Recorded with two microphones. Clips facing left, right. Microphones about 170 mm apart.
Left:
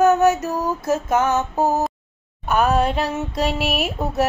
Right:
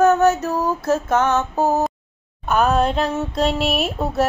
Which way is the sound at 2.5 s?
5° left (ahead or behind).